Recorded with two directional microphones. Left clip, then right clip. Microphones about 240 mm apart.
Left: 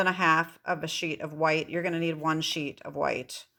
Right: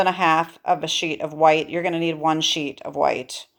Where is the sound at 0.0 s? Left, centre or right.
Left.